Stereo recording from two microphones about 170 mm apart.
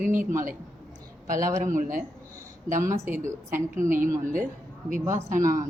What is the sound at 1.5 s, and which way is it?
Speech, 50° right (ahead or behind).